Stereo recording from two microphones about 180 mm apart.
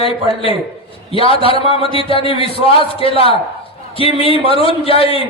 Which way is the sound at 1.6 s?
30° left (ahead or behind).